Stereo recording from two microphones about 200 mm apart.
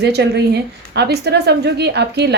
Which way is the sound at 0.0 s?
55° right (ahead or behind).